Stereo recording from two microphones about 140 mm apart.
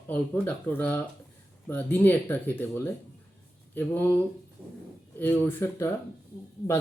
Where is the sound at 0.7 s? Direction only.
15° left (ahead or behind).